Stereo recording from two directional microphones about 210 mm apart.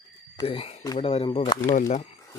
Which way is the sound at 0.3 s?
25° left (ahead or behind).